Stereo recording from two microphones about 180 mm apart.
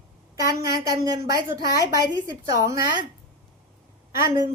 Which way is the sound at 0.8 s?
20° right (ahead or behind).